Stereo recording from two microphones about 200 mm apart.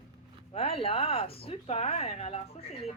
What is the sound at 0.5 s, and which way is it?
A woman's voice, 30° left (ahead or behind).